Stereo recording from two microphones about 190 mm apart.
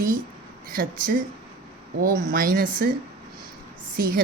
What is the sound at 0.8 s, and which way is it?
A woman's voice, 45° right (ahead or behind).